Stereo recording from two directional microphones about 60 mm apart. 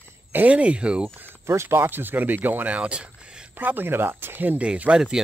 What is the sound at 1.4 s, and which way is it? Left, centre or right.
Speech, right.